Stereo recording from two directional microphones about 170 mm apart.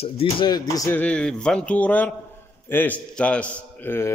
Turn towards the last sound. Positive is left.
turn(degrees=15)  # may be behind; listen again after turning